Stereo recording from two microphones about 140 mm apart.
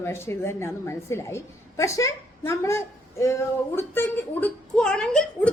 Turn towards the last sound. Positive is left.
turn(degrees=5)  # may be behind; listen again after turning